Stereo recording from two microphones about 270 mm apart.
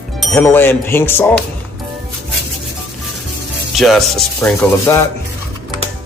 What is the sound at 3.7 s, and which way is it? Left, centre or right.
Speech, centre.